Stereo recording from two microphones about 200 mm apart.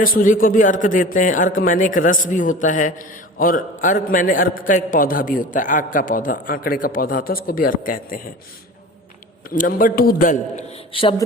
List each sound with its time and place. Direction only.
0.0 s a man's voice: 45° left (ahead or behind)
9.5 s a man's voice: 45° left (ahead or behind)